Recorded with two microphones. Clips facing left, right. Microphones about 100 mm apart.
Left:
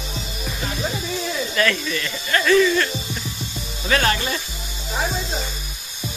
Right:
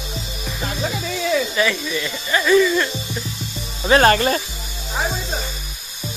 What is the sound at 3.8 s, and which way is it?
Speech, 35° right (ahead or behind).